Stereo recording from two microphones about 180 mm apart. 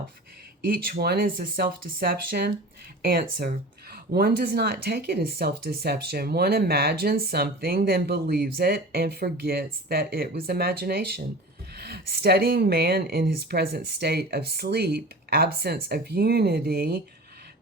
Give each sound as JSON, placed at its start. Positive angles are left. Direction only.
{"t": 0.7, "sound": "speech", "side_deg": -60}